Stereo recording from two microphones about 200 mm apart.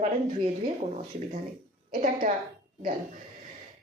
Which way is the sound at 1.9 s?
45° right (ahead or behind).